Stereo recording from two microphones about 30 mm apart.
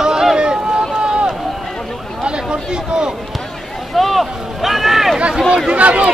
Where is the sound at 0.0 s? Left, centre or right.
Right.